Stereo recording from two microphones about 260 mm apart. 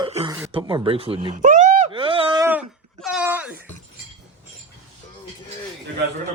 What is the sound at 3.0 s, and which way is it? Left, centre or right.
Wail, centre.